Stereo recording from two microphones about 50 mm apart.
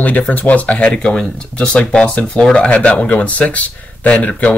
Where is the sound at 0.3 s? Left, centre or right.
Left.